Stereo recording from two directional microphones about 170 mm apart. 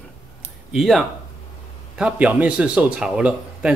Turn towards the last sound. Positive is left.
turn(degrees=-5)  # may be behind; listen again after turning